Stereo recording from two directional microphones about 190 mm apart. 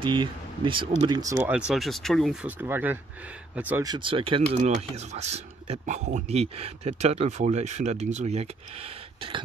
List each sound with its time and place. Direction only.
0.0 s speech: 25° right (ahead or behind)
1.7 s speech: centre (ahead or behind)
2.4 s speech: 10° right (ahead or behind)
3.8 s speech: 25° right (ahead or behind)